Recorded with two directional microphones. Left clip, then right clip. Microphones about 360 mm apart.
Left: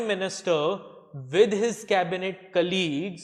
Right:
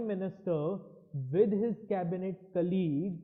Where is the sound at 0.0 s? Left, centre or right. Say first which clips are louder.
Left 9 dB; centre.